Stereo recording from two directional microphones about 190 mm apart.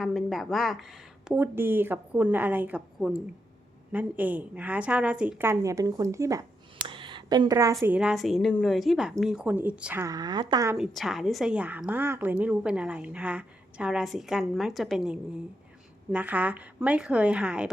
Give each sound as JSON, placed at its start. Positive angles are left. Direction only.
{"t": 0.0, "sound": "a woman's voice", "side_deg": 0}
{"t": 1.3, "sound": "a woman's voice", "side_deg": -10}
{"t": 7.9, "sound": "a woman's voice", "side_deg": 0}
{"t": 10.8, "sound": "a woman's voice", "side_deg": 0}